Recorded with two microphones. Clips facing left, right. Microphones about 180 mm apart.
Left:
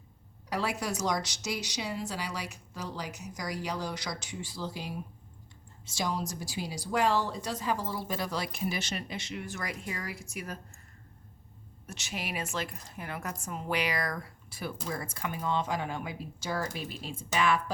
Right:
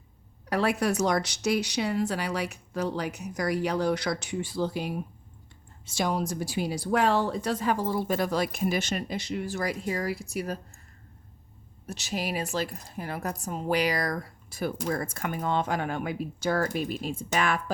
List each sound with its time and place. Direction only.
0.5 s a woman's voice: 60° right (ahead or behind); by 10.6 s 35° right (ahead or behind)
11.9 s a woman's voice: 35° right (ahead or behind)